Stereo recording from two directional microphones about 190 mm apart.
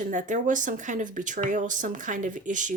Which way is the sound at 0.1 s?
40° right (ahead or behind).